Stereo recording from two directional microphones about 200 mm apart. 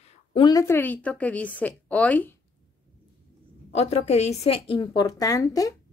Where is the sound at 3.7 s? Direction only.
30° left (ahead or behind).